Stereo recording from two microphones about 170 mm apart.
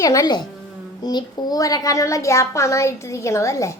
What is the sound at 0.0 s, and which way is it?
A woman's voice, 20° left (ahead or behind).